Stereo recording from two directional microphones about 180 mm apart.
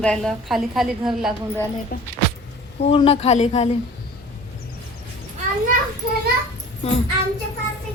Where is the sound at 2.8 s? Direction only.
30° left (ahead or behind).